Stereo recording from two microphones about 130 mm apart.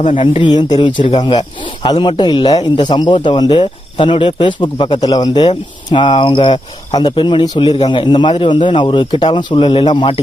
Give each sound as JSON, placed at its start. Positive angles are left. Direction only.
{"t": 0.2, "sound": "speech", "side_deg": 40}